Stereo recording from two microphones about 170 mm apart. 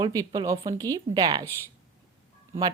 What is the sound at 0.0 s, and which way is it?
Speech, 20° right (ahead or behind).